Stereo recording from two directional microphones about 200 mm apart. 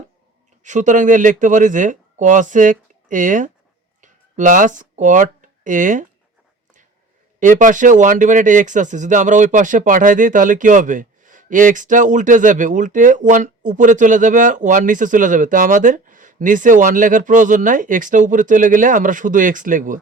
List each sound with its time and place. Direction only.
0.6 s speech: 40° right (ahead or behind)
7.3 s speech: 40° right (ahead or behind)